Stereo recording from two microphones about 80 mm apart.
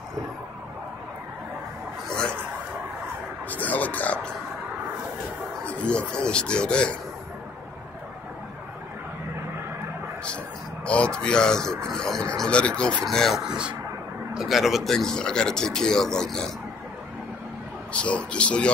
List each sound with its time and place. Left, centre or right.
3.4 s music: centre
5.7 s a sound: centre
10.9 s speech: centre
13.0 s speech: centre
13.4 s speech: centre
17.9 s speech: centre